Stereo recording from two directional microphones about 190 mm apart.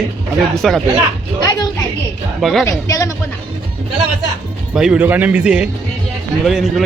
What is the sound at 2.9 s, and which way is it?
Speech, 15° left (ahead or behind).